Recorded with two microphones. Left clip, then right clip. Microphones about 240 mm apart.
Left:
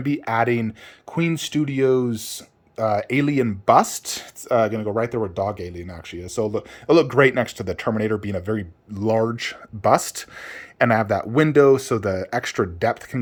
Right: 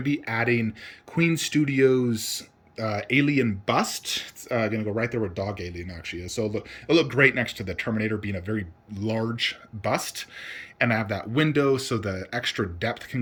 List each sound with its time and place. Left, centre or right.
0.0 s speech: centre
5.5 s speech: left
5.8 s speech: centre